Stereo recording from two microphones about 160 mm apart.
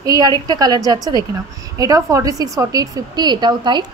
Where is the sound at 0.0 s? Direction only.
25° right (ahead or behind).